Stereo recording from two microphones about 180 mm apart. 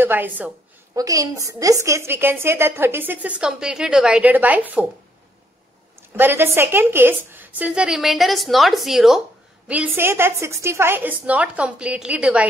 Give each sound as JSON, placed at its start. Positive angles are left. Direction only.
{"t": 0.0, "sound": "a woman's voice", "side_deg": -10}
{"t": 6.1, "sound": "a woman's voice", "side_deg": -10}